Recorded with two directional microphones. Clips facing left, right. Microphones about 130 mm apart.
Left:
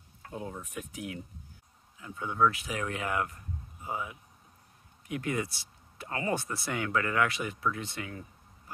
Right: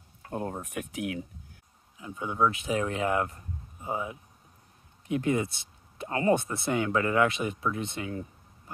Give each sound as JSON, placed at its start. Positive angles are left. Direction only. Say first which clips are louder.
{"t": 0.3, "sound": "speech", "louder": "right 6 dB", "side_deg": -60}
{"t": 2.0, "sound": "speech", "louder": "right 1 dB", "side_deg": -20}